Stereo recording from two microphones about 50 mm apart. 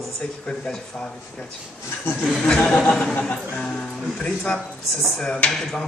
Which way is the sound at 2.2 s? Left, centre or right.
Centre.